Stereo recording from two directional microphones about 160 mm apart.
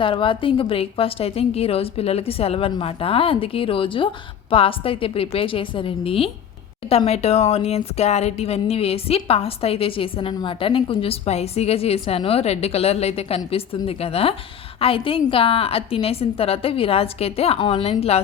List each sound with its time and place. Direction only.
0.0 s a woman's voice: 35° left (ahead or behind)